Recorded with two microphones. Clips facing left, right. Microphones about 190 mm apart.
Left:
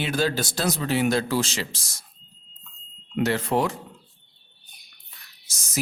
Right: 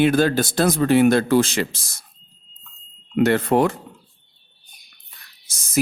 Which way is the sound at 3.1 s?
55° right (ahead or behind).